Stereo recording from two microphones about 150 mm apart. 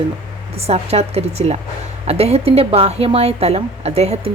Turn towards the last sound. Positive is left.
turn(degrees=-45)  # may be behind; listen again after turning